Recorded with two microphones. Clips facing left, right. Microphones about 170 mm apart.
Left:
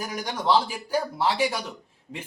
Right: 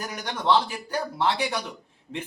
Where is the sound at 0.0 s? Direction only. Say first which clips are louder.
Left 1 dB; 10° left (ahead or behind).